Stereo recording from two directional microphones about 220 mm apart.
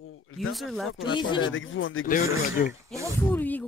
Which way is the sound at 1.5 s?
60° left (ahead or behind).